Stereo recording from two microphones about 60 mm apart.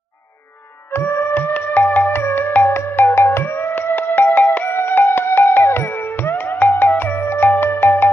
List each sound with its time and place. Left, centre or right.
0.9 s music: left